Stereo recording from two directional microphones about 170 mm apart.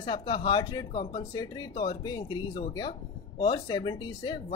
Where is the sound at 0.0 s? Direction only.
25° left (ahead or behind).